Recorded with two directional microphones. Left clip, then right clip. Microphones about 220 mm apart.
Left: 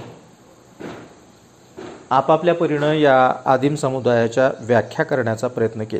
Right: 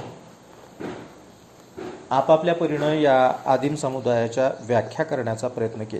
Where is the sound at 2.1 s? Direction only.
40° left (ahead or behind).